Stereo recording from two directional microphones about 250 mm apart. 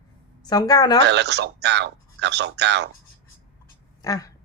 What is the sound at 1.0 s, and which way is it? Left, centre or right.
Speech, right.